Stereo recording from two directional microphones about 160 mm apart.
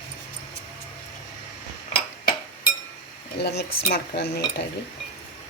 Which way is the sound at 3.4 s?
90° left.